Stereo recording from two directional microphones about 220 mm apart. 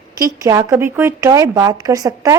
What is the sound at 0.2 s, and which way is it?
A woman's voice, 15° right (ahead or behind).